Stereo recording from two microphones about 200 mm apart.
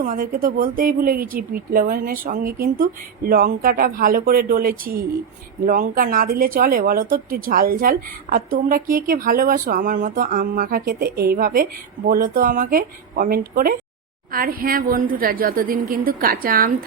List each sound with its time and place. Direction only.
0.0 s speech: 40° right (ahead or behind)